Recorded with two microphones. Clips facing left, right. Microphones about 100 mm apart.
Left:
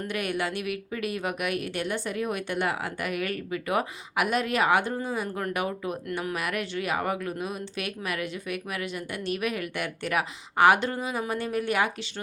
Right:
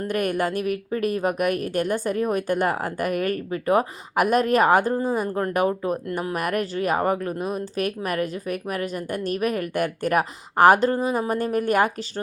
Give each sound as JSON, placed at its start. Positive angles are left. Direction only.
{"t": 0.0, "sound": "a woman's voice", "side_deg": -45}